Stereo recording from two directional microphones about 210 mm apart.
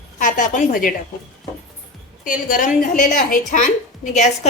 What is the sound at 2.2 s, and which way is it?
A woman's voice, 40° left (ahead or behind).